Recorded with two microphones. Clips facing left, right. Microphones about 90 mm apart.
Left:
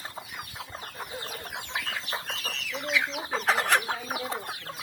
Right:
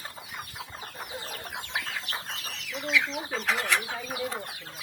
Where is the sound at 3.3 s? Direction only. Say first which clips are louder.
Left 3 dB; 40° left (ahead or behind).